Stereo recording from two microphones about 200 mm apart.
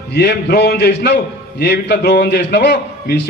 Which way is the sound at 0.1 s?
60° left (ahead or behind).